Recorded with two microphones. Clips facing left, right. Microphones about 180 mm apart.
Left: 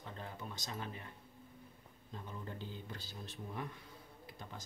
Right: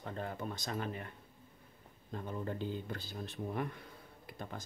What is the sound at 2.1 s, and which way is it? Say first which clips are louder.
Speech: right 7 dB; 55° right (ahead or behind).